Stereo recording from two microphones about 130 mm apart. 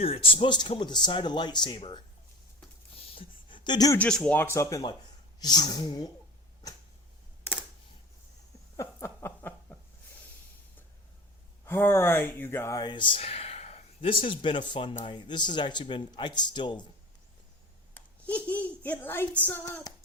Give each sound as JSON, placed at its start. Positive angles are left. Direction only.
{"t": 0.0, "sound": "speech", "side_deg": 45}
{"t": 2.9, "sound": "a sound", "side_deg": 45}
{"t": 3.9, "sound": "speech", "side_deg": 10}
{"t": 8.7, "sound": "a sound", "side_deg": 25}
{"t": 11.6, "sound": "speech", "side_deg": 20}
{"t": 17.9, "sound": "a child's voice", "side_deg": 10}